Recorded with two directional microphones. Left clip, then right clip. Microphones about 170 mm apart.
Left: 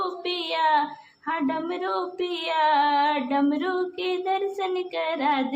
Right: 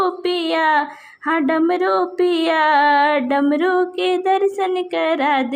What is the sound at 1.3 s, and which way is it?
Speech, 40° right (ahead or behind).